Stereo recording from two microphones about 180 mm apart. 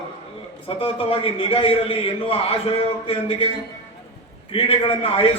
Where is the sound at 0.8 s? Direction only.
30° left (ahead or behind).